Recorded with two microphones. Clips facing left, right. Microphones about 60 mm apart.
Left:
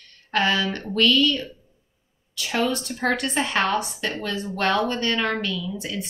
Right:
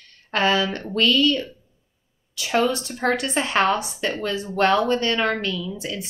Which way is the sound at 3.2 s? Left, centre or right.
Centre.